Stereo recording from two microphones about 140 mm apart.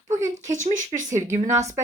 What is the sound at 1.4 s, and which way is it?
Speech, 20° right (ahead or behind).